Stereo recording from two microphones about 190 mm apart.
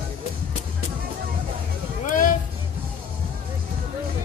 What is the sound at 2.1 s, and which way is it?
Music, 45° left (ahead or behind).